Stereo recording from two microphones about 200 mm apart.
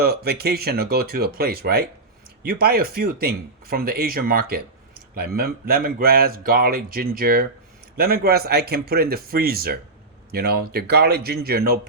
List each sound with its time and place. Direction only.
0.0 s speech: 50° right (ahead or behind)